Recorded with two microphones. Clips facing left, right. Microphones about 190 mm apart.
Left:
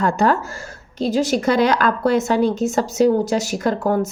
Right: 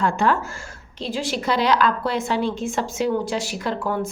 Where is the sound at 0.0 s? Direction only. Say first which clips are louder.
Left 3 dB; 40° left (ahead or behind).